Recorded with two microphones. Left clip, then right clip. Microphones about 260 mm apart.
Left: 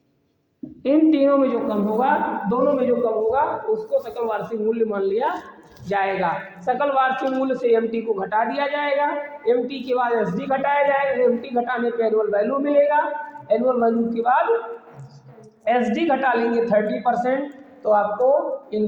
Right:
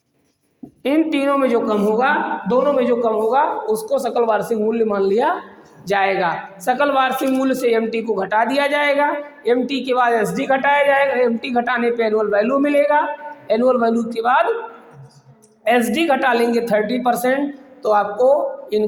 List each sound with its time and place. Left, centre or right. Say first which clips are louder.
0.8 s a woman's voice: left 1 dB; right
15.6 s speech: right 4 dB; right